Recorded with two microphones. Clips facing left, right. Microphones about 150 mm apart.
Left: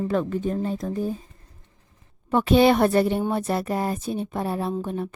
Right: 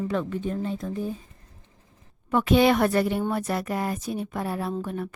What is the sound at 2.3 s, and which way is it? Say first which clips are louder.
Speech: left 2 dB; 30° left (ahead or behind).